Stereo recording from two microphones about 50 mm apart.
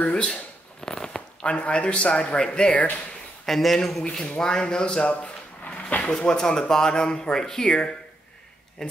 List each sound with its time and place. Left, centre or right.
0.0 s a sound: left
1.5 s a man's voice: left
3.4 s speech: centre
4.2 s speech: centre
5.1 s drawer open or close: left
6.1 s speech: centre